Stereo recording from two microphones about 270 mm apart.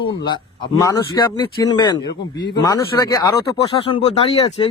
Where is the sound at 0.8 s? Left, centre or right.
Centre.